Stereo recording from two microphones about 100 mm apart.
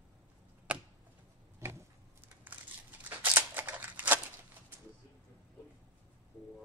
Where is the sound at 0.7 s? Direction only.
10° right (ahead or behind).